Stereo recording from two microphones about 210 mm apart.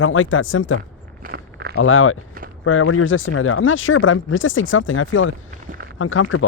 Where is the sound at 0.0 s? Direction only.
70° left (ahead or behind).